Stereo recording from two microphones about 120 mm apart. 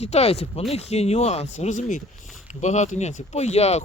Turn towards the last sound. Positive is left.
turn(degrees=65)  # may be behind; listen again after turning